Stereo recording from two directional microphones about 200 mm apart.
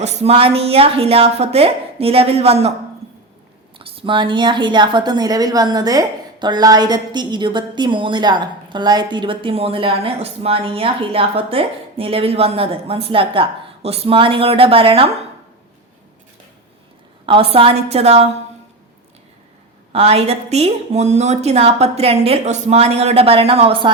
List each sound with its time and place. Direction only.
0.0 s a woman's voice: 35° right (ahead or behind)
3.8 s a woman's voice: 25° right (ahead or behind)
17.2 s a woman's voice: 25° right (ahead or behind)
19.9 s a woman's voice: 30° right (ahead or behind)